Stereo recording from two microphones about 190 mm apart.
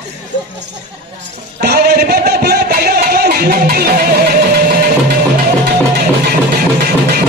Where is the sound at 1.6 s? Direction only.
55° right (ahead or behind).